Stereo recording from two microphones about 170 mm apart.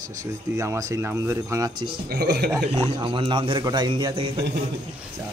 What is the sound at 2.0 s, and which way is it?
Speech, 70° right (ahead or behind).